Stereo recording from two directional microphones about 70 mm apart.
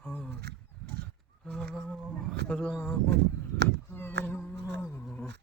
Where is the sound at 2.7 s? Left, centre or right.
Left.